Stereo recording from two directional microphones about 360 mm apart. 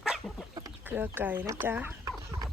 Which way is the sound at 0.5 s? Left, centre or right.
Centre.